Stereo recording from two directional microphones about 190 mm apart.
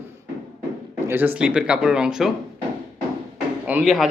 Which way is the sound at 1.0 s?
10° right (ahead or behind).